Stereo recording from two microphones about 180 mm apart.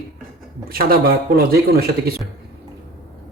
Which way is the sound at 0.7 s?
55° right (ahead or behind).